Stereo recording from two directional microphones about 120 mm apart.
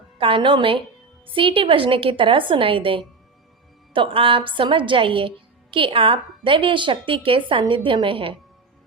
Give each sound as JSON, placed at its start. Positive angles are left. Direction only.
{"t": 0.2, "sound": "a woman's voice", "side_deg": -45}